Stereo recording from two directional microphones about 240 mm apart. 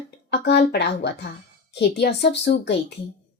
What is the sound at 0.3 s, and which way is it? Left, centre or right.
Speech, left.